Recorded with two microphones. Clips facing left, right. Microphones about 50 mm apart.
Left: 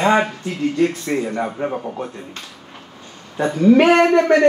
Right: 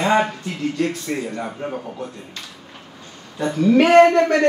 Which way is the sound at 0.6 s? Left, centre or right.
Centre.